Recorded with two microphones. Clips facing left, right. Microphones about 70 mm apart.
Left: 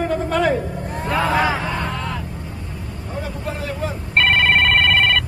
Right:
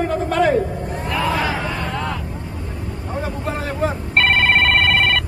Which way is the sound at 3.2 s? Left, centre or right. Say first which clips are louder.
Right 3 dB; right.